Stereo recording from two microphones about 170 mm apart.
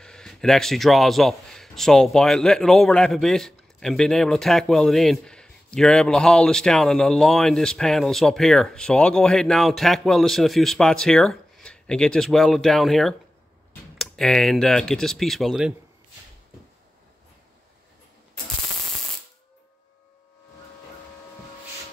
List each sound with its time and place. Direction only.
0.0 s speech: 5° left (ahead or behind)